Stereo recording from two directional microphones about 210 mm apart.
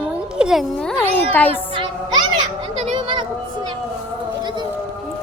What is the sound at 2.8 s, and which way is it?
Music, 20° right (ahead or behind).